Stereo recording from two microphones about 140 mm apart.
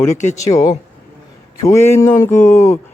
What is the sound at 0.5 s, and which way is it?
Speech, 30° left (ahead or behind).